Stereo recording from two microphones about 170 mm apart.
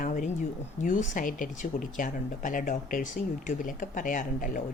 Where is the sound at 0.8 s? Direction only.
50° left (ahead or behind).